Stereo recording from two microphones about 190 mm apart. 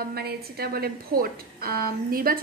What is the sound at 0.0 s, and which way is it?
A woman's voice, 55° right (ahead or behind).